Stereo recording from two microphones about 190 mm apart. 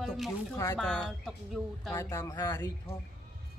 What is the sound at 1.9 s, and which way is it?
Speech, 15° left (ahead or behind).